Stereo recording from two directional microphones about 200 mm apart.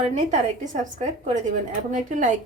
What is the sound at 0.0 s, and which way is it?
A woman's voice, 35° right (ahead or behind).